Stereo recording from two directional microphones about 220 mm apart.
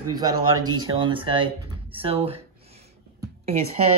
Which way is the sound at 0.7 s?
20° right (ahead or behind).